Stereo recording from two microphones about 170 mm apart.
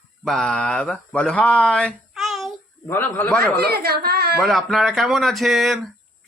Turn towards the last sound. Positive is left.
turn(degrees=0)  # may be behind; listen again after turning